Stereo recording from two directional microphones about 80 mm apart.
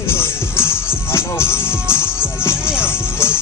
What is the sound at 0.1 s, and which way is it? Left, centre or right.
Music, left.